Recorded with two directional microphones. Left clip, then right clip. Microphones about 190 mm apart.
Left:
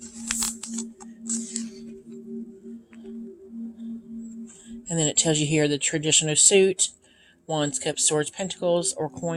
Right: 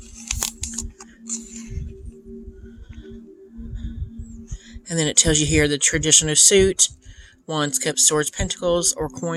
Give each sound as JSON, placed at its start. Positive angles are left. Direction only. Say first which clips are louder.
{"t": 0.3, "sound": "music", "louder": "right 2 dB", "side_deg": -30}
{"t": 4.7, "sound": "speech", "louder": "right 4 dB", "side_deg": -30}